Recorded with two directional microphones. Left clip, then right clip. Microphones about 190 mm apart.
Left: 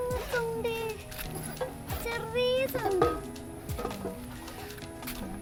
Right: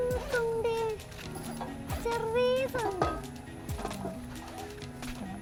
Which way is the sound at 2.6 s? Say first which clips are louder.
Left 3 dB; centre (ahead or behind).